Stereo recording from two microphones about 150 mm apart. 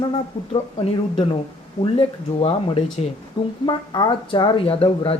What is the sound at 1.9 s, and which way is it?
Speech, 40° left (ahead or behind).